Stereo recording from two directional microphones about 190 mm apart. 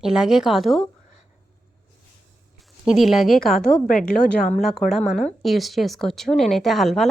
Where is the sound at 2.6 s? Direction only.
Centre (ahead or behind).